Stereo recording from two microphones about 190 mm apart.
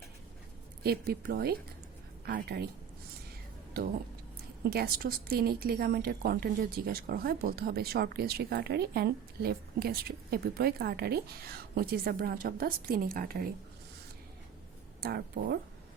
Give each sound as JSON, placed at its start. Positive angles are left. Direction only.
{"t": 0.8, "sound": "a woman's voice", "side_deg": -55}
{"t": 3.8, "sound": "a woman's voice", "side_deg": -50}
{"t": 15.0, "sound": "speech", "side_deg": -60}